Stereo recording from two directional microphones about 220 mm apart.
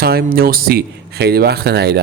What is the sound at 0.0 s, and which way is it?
A man's voice, 45° right (ahead or behind).